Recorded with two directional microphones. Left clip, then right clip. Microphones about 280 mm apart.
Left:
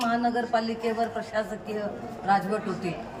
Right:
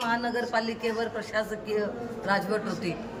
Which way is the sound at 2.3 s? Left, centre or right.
Centre.